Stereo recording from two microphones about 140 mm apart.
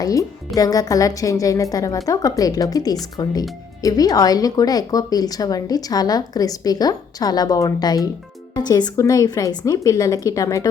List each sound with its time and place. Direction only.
0.0 s speech: 25° left (ahead or behind)